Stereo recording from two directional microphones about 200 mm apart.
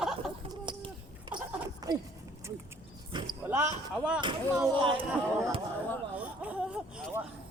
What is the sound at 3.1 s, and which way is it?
Basketball bounce, 25° right (ahead or behind).